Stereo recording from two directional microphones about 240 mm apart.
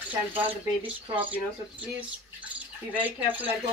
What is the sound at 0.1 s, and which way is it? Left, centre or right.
Speech, centre.